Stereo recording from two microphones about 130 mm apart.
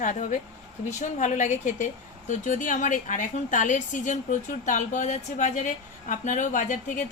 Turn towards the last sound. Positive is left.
turn(degrees=85)